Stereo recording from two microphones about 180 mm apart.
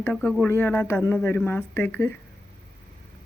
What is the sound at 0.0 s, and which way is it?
Speech, 5° left (ahead or behind).